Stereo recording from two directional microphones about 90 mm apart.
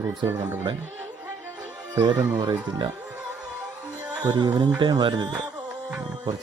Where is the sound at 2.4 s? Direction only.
60° right (ahead or behind).